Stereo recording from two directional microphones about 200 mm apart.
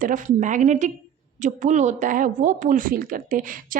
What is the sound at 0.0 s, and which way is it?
Speech, 40° right (ahead or behind).